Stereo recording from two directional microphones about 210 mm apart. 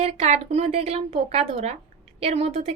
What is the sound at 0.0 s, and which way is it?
A woman's voice, 30° right (ahead or behind).